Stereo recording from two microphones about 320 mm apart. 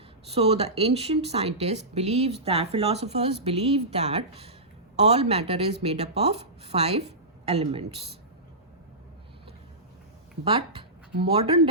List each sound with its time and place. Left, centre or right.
0.3 s speech: centre
10.4 s speech: centre